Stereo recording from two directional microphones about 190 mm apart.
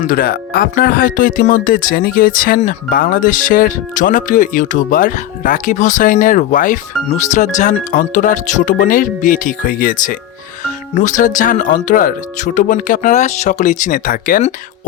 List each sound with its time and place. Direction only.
0.0 s speech: 50° left (ahead or behind)